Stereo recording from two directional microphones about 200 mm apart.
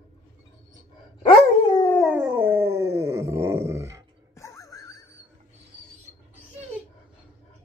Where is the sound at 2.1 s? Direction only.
5° right (ahead or behind).